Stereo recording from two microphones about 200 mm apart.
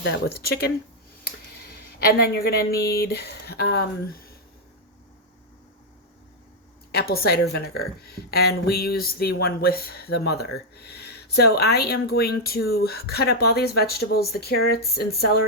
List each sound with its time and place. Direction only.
0.0 s a woman's voice: 55° left (ahead or behind)
6.9 s a woman's voice: 50° left (ahead or behind)